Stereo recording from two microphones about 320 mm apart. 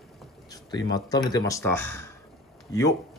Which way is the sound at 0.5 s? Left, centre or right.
Centre.